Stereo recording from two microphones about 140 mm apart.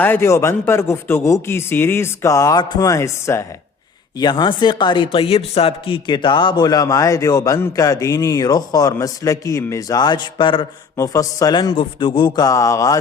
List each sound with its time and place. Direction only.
0.0 s speech: 15° left (ahead or behind)
4.2 s speech: 30° left (ahead or behind)
10.9 s speech: 25° left (ahead or behind)